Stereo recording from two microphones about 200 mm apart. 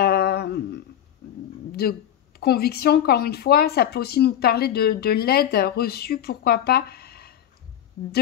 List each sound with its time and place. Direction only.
0.0 s humming: 50° left (ahead or behind)
1.7 s a sound: 50° left (ahead or behind)
2.4 s speech: 50° left (ahead or behind)